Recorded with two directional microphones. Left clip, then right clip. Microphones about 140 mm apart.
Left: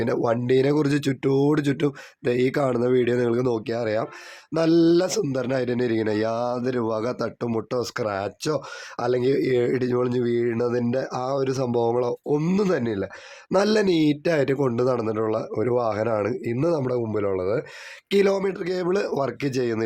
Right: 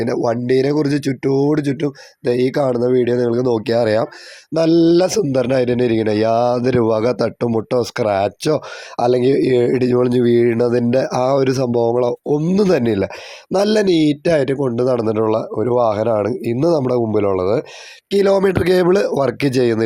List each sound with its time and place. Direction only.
0.3 s speech: 20° right (ahead or behind)
3.5 s speech: 40° right (ahead or behind)
4.5 s a man's voice: 30° right (ahead or behind)
11.7 s speech: 25° right (ahead or behind); by 13.1 s 45° right (ahead or behind)
13.5 s speech: 15° right (ahead or behind)
13.8 s speech: 30° right (ahead or behind)
14.9 s a man's voice: 35° right (ahead or behind)
18.3 s speech: 60° right (ahead or behind)
18.9 s a man's voice: 35° right (ahead or behind)